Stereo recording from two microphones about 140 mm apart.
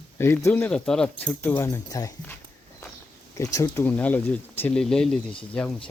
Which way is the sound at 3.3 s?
25° left (ahead or behind).